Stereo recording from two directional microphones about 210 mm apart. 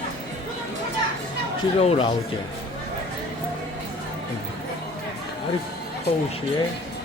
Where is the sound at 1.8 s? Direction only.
25° left (ahead or behind).